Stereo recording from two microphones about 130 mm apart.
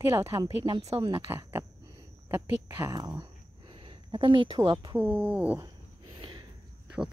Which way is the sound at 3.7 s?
40° right (ahead or behind).